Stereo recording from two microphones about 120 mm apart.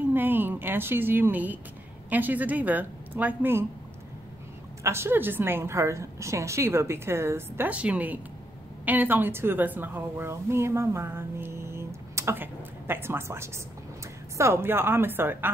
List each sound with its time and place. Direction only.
0.0 s a woman's voice: 15° right (ahead or behind)
4.8 s a woman's voice: 20° right (ahead or behind)